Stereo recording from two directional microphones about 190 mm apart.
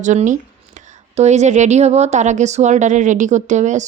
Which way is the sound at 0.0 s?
40° right (ahead or behind).